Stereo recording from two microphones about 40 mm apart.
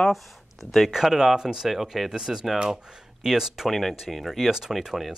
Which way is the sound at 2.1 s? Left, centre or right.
Centre.